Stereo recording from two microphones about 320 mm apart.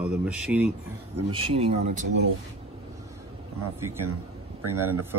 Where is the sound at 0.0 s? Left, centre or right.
Centre.